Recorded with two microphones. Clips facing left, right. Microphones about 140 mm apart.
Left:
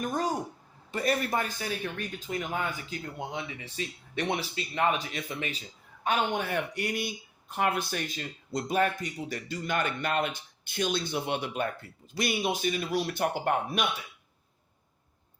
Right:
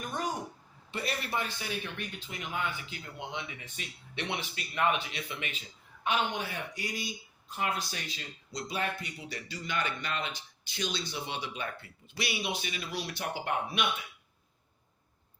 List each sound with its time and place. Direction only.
0.0 s a sound: 35° left (ahead or behind)
0.9 s a man's voice: 45° left (ahead or behind)
6.1 s speech: 55° left (ahead or behind)